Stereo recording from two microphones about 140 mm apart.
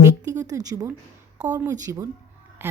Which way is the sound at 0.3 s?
25° right (ahead or behind).